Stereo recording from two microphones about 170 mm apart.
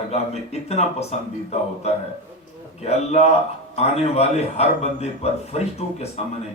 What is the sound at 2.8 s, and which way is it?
A man's voice, 40° left (ahead or behind).